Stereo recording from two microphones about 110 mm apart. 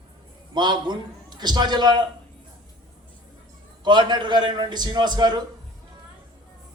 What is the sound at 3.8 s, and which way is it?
A man's voice, 45° right (ahead or behind).